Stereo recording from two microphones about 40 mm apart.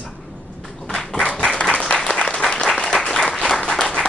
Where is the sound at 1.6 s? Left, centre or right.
Left.